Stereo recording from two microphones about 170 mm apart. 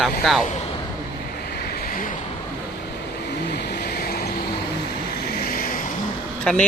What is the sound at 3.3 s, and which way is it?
Vehicle, 80° left.